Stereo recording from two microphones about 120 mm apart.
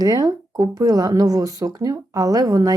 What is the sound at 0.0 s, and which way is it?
A woman's voice, 30° right (ahead or behind).